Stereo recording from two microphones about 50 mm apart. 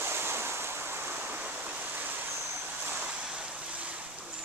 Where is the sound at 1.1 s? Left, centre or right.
Right.